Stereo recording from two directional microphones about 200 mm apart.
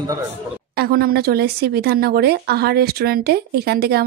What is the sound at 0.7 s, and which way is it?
Speech, 50° right (ahead or behind).